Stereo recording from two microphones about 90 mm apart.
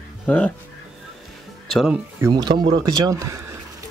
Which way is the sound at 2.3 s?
50° right (ahead or behind).